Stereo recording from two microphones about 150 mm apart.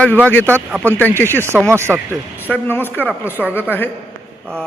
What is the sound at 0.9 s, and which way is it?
Speech, 15° left (ahead or behind).